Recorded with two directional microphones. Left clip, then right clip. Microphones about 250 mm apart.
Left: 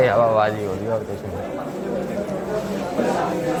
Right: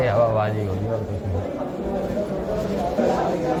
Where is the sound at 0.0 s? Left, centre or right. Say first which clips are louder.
Left 3 dB; left.